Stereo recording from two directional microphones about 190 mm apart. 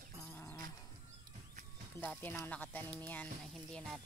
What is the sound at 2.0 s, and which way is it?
Speech, 10° left (ahead or behind).